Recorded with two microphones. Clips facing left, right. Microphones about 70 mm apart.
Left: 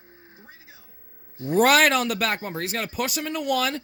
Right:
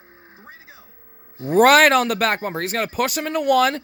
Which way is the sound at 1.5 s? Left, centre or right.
Right.